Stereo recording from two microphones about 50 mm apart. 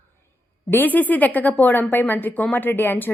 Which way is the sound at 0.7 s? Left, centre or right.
Left.